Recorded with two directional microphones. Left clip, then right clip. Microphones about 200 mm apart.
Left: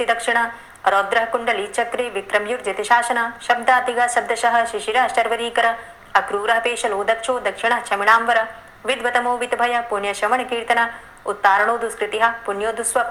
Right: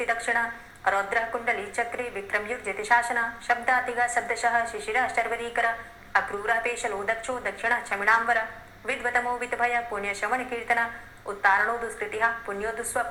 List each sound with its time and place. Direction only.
0.0 s a woman's voice: 40° left (ahead or behind)